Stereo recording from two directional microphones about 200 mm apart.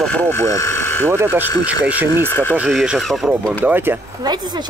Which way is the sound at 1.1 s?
10° right (ahead or behind).